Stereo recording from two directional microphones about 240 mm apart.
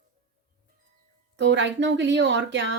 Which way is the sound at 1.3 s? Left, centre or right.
Right.